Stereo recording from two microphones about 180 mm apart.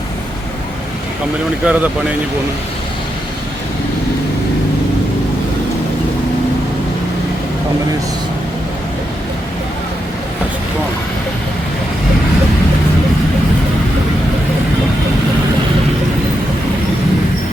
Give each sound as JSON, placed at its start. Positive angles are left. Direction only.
{"t": 1.6, "sound": "speech", "side_deg": -10}